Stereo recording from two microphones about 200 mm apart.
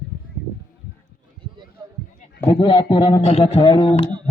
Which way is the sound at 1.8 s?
20° right (ahead or behind).